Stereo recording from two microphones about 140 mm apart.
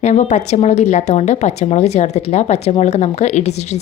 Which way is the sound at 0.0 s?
60° left (ahead or behind).